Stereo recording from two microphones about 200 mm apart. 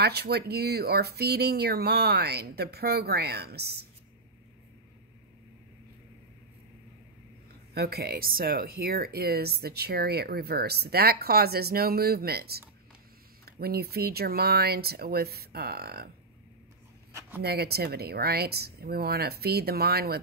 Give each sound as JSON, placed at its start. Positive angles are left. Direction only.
{"t": 0.0, "sound": "speech", "side_deg": -55}
{"t": 7.7, "sound": "speech", "side_deg": -50}
{"t": 17.4, "sound": "speech", "side_deg": -50}